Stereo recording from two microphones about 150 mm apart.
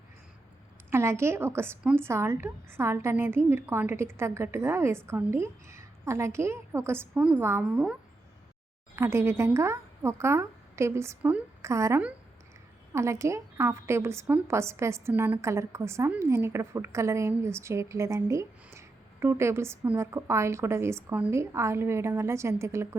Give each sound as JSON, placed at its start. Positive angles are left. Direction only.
{"t": 0.9, "sound": "a woman's voice", "side_deg": -15}
{"t": 9.0, "sound": "a woman's voice", "side_deg": -15}